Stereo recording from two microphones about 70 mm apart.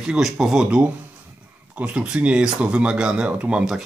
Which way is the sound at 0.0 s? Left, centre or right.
Centre.